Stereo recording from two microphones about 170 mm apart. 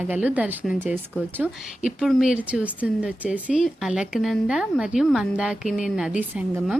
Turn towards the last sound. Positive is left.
turn(degrees=-10)  # may be behind; listen again after turning